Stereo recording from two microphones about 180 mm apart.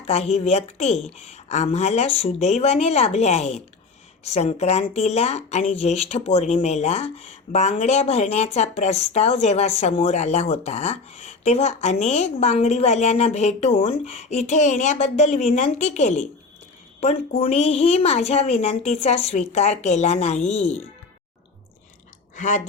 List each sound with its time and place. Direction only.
0.1 s speech: 35° left (ahead or behind)
22.4 s speech: 45° left (ahead or behind)